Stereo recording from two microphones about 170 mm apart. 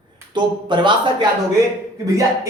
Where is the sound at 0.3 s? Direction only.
30° right (ahead or behind).